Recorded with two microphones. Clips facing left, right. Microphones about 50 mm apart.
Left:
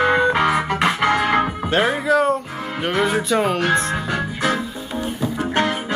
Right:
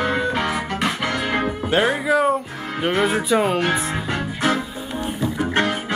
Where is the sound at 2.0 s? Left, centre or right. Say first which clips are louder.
Left 1 dB; centre.